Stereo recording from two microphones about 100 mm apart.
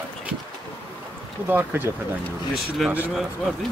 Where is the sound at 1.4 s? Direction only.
20° right (ahead or behind).